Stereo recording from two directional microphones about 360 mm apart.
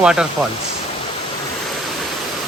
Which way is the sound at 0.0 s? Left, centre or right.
Centre.